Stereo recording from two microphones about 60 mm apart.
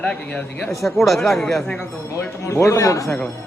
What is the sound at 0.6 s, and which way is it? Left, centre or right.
Speech, centre.